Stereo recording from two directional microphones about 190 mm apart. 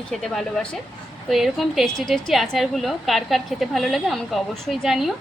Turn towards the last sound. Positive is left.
turn(degrees=0)  # may be behind; listen again after turning